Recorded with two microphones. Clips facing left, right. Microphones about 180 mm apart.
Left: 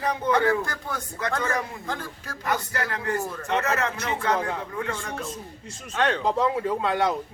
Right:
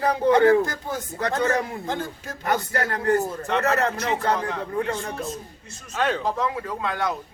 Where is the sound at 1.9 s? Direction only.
25° right (ahead or behind).